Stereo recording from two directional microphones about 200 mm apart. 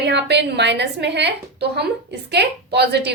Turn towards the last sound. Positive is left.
turn(degrees=-55)  # may be behind; listen again after turning